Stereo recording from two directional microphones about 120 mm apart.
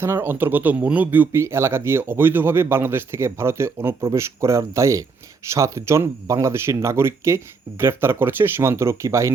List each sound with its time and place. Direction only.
0.0 s a man's voice: 20° right (ahead or behind)